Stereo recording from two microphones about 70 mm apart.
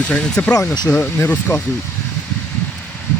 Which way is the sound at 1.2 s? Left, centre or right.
Left.